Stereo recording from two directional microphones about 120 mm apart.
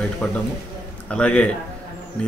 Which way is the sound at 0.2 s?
10° left (ahead or behind).